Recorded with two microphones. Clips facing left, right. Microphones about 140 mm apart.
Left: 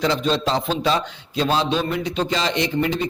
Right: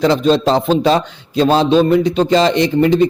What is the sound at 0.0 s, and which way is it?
A man's voice, 40° right (ahead or behind).